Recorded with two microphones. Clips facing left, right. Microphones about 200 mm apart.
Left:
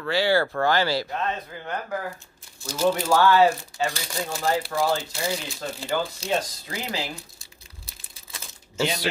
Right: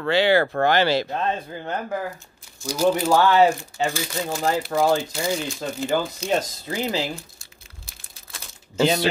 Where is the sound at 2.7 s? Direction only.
20° right (ahead or behind).